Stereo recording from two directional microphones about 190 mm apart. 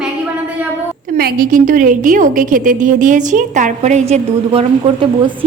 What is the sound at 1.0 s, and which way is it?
A woman's voice, 50° right (ahead or behind).